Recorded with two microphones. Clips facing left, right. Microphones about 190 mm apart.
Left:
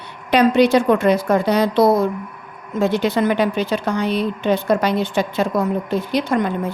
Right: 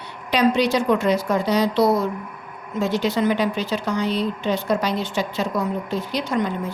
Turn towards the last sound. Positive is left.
turn(degrees=55)  # may be behind; listen again after turning